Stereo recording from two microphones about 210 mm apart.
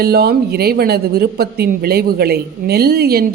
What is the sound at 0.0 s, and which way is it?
Speech, 50° right (ahead or behind).